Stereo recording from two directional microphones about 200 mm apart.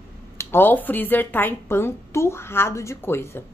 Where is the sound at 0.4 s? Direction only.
10° left (ahead or behind).